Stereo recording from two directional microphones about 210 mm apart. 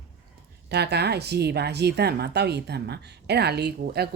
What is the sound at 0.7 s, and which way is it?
Speech, 50° right (ahead or behind).